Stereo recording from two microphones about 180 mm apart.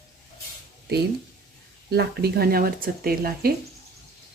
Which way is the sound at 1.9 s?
65° right (ahead or behind).